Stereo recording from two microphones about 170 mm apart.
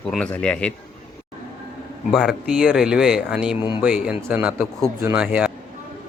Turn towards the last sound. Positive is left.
turn(degrees=-5)  # may be behind; listen again after turning